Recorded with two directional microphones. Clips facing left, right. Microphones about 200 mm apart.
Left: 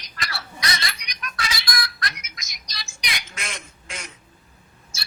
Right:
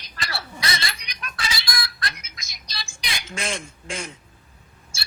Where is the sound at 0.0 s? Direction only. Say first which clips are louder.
Right 1 dB; 30° right (ahead or behind).